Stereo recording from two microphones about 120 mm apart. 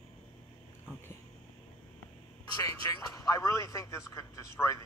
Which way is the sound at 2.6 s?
30° left (ahead or behind).